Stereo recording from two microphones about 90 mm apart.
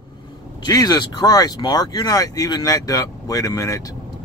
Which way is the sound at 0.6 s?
45° left (ahead or behind).